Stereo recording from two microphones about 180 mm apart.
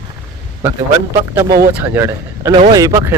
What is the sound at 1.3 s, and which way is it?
A man's voice, 20° right (ahead or behind).